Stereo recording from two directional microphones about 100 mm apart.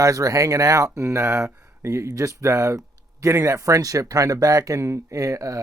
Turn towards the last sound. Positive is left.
turn(degrees=-35)  # may be behind; listen again after turning